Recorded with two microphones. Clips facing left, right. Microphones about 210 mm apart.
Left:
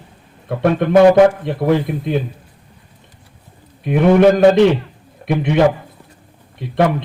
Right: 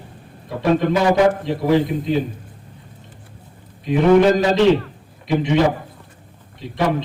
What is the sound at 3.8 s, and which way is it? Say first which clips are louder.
A man's voice: left 2 dB; 60° left (ahead or behind).